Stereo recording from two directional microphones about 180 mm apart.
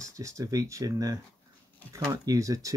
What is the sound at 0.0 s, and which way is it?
Speech, 15° right (ahead or behind).